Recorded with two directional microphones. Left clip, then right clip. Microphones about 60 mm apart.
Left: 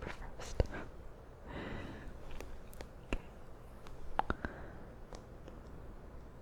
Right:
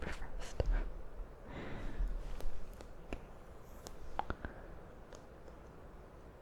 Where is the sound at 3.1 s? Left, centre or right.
Left.